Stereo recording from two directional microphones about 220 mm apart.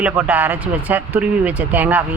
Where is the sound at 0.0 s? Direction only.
10° right (ahead or behind).